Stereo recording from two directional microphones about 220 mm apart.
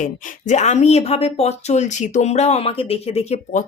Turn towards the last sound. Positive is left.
turn(degrees=30)  # may be behind; listen again after turning